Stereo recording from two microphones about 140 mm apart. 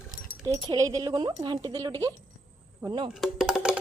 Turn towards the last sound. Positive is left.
turn(degrees=-5)  # may be behind; listen again after turning